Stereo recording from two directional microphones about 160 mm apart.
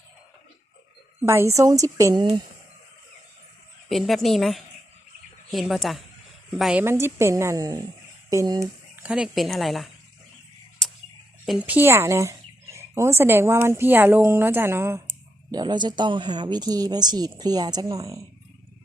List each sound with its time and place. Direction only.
1.2 s speech: 15° right (ahead or behind)
3.8 s a woman's voice: centre (ahead or behind)
6.8 s speech: 15° right (ahead or behind)
9.0 s a woman's voice: 5° right (ahead or behind)
11.4 s speech: 5° right (ahead or behind)
15.5 s speech: 25° right (ahead or behind)